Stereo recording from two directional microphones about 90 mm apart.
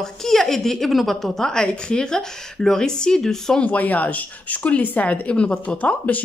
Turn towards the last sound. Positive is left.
turn(degrees=15)  # may be behind; listen again after turning